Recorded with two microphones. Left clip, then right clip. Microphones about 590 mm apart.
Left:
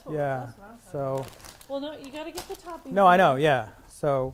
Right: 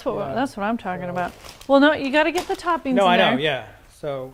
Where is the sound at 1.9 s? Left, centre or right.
Right.